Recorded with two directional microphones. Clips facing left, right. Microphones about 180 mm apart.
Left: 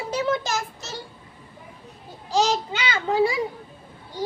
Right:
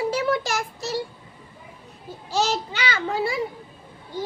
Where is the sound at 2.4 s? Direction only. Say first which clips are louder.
Left 1 dB; 25° left (ahead or behind).